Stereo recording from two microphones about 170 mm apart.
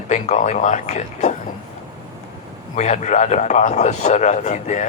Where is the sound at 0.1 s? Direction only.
45° left (ahead or behind).